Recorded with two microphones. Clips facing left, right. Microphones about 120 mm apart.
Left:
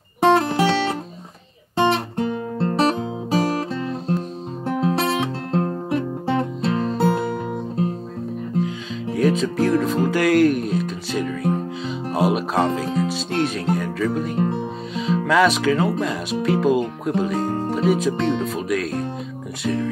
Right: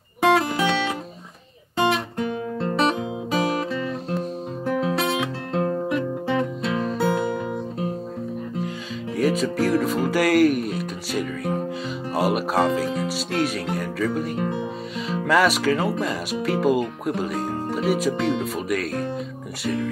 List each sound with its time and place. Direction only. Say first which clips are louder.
0.2 s music: left 3 dB; 35° left (ahead or behind)
1.8 s guitar: left 3 dB; 35° left (ahead or behind)
4.6 s music: left 2 dB; 35° left (ahead or behind)
8.6 s music: left 3 dB; 5° right (ahead or behind)
10.0 s speech: left 1 dB; 5° right (ahead or behind)